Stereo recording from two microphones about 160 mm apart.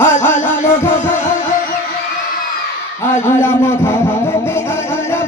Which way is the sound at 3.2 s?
15° left (ahead or behind).